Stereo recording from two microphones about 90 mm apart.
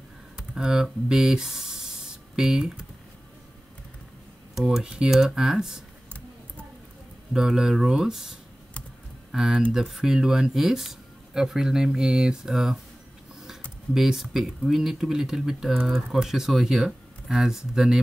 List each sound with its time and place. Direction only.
0.4 s speech: 10° right (ahead or behind)
4.6 s speech: 10° right (ahead or behind)
6.0 s a sound: 15° left (ahead or behind)
7.3 s speech: 5° right (ahead or behind)
13.9 s speech: 5° right (ahead or behind)